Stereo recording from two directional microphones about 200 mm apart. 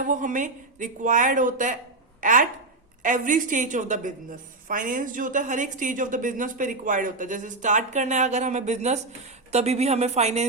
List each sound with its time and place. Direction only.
0.0 s a woman's voice: 40° right (ahead or behind)